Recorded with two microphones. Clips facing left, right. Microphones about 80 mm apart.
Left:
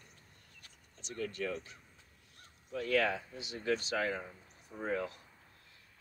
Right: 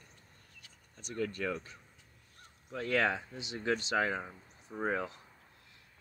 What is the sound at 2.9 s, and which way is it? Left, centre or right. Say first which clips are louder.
Speech: right 1 dB; right.